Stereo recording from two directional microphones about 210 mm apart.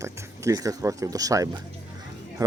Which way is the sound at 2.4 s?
15° right (ahead or behind).